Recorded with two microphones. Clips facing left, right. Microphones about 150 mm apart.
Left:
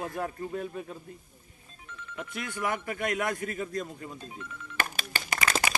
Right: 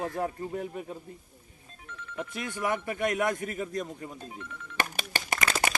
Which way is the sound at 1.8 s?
70° right (ahead or behind).